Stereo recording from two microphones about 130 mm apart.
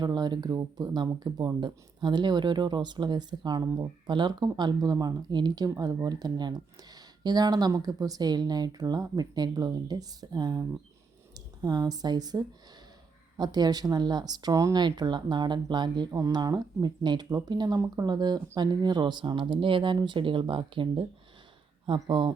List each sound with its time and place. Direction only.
0.0 s speech: 35° right (ahead or behind)